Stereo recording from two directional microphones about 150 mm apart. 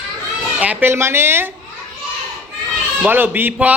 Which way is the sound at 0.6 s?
10° right (ahead or behind).